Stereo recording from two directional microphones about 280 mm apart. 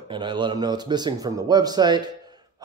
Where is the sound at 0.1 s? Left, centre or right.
Centre.